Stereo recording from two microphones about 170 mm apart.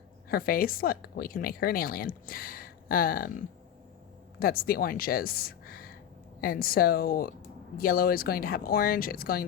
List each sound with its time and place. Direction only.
0.3 s a woman's voice: 60° left (ahead or behind)
4.4 s a woman's voice: 60° left (ahead or behind)